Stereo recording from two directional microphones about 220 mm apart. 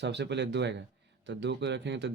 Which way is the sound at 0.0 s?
50° right (ahead or behind).